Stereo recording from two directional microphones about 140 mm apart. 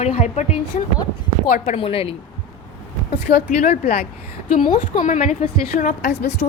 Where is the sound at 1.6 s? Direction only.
45° left (ahead or behind).